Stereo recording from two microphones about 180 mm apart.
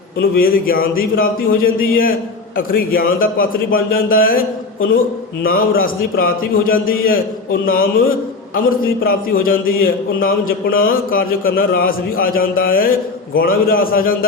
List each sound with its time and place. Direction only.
0.2 s a man's voice: 55° left (ahead or behind)
5.4 s a man's voice: 55° left (ahead or behind)
9.0 s a man's voice: 55° left (ahead or behind)